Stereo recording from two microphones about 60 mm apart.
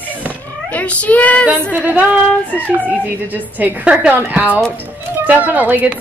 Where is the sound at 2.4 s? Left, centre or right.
Left.